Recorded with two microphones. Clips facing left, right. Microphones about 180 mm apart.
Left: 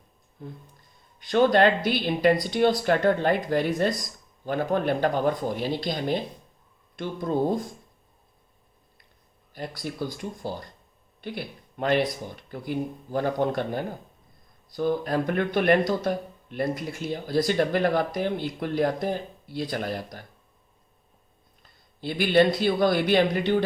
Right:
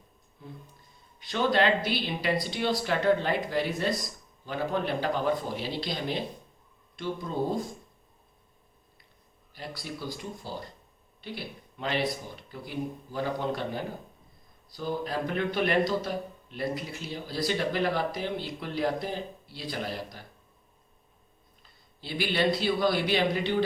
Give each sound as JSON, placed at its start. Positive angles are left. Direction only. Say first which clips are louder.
{"t": 0.4, "sound": "speech", "louder": "left 4 dB", "side_deg": 50}
{"t": 9.6, "sound": "speech", "louder": "left 6 dB", "side_deg": 50}
{"t": 21.6, "sound": "speech", "louder": "left 11 dB", "side_deg": 50}